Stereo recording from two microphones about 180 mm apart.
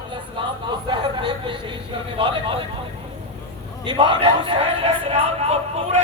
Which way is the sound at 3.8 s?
25° right (ahead or behind).